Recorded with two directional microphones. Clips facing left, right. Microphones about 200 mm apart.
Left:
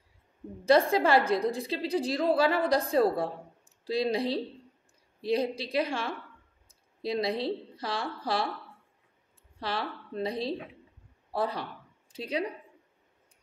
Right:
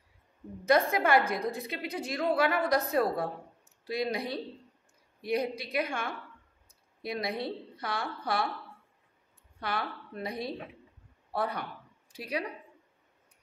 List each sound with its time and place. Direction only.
0.7 s a woman's voice: 30° left (ahead or behind)
9.6 s a woman's voice: 30° left (ahead or behind)